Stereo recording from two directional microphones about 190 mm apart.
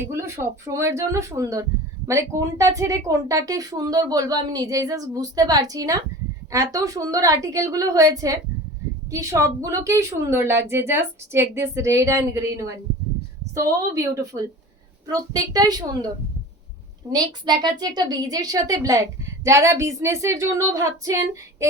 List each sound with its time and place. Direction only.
0.1 s a woman's voice: 15° right (ahead or behind)
17.1 s a woman's voice: 20° right (ahead or behind)